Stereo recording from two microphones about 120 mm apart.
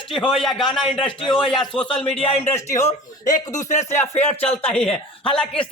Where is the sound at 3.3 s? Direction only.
90° left.